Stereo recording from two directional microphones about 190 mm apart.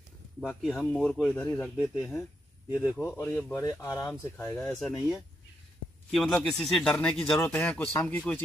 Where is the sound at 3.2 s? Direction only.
10° left (ahead or behind).